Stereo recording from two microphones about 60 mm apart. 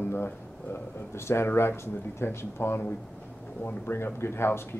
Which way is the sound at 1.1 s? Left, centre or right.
Left.